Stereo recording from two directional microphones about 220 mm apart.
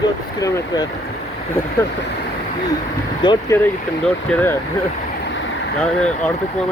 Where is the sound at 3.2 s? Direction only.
15° left (ahead or behind).